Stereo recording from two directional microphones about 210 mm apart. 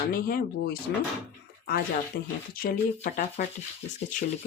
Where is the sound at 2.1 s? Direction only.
40° left (ahead or behind).